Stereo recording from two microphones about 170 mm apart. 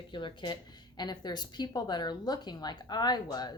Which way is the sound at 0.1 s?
30° left (ahead or behind).